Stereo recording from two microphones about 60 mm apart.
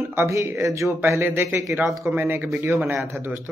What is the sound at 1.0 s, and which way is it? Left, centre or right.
Speech, right.